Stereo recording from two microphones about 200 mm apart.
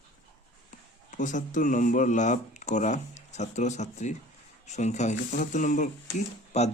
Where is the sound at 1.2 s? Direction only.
40° left (ahead or behind).